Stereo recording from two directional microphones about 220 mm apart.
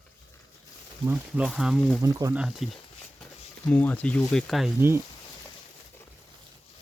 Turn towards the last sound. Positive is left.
turn(degrees=-10)  # may be behind; listen again after turning